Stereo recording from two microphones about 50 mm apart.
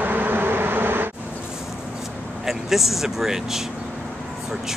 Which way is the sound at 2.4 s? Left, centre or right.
Centre.